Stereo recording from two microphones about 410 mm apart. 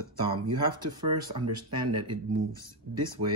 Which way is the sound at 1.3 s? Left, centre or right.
Right.